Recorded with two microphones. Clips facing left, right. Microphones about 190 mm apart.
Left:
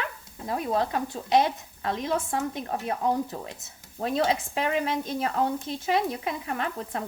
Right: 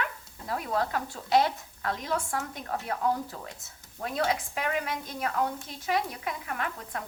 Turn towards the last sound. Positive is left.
turn(degrees=25)  # may be behind; listen again after turning